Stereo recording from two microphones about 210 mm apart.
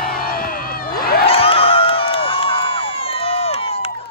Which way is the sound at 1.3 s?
25° left (ahead or behind).